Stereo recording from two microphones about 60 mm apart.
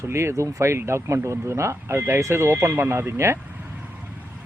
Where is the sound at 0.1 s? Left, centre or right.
Right.